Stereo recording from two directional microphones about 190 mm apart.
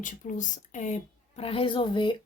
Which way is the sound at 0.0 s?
45° left (ahead or behind).